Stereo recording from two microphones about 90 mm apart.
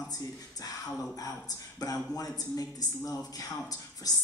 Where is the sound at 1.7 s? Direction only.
40° left (ahead or behind).